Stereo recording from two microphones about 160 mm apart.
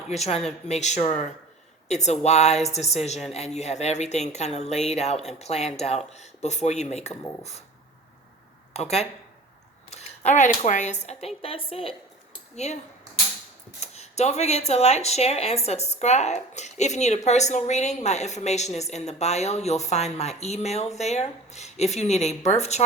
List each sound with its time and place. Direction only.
0.1 s speech: 40° left (ahead or behind)
8.7 s speech: 40° left (ahead or behind)
11.7 s a sound: 35° left (ahead or behind)
13.7 s speech: 45° left (ahead or behind)